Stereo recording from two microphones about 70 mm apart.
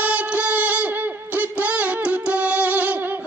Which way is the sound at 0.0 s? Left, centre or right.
Centre.